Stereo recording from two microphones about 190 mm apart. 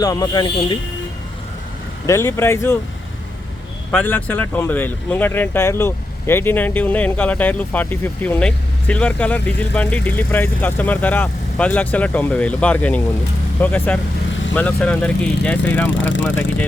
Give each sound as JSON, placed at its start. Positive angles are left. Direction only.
{"t": 0.0, "sound": "speech", "side_deg": 20}
{"t": 2.0, "sound": "speech", "side_deg": 15}
{"t": 3.9, "sound": "speech", "side_deg": 10}
{"t": 16.0, "sound": "speech", "side_deg": 80}